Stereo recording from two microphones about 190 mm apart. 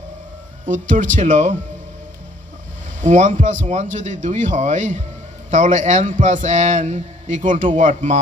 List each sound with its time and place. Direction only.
0.6 s a man's voice: 45° right (ahead or behind)
3.0 s a man's voice: 40° right (ahead or behind)